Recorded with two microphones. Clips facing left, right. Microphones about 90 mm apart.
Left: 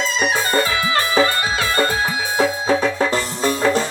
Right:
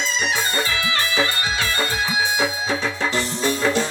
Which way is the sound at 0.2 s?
45° left (ahead or behind).